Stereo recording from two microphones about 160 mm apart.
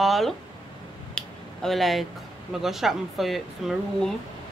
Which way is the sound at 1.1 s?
Centre (ahead or behind).